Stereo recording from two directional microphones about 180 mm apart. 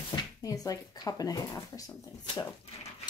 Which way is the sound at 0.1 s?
20° left (ahead or behind).